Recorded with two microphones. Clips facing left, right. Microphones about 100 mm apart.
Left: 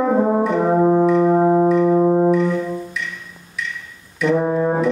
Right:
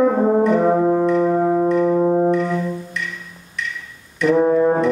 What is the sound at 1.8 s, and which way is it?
Brass instrument, 10° left (ahead or behind).